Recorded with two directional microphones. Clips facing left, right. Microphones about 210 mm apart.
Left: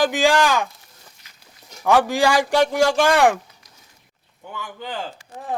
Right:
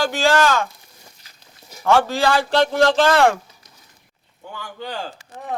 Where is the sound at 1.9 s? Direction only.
15° left (ahead or behind).